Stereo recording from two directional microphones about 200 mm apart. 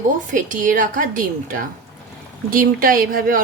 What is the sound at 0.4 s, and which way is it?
A woman's voice, 40° right (ahead or behind).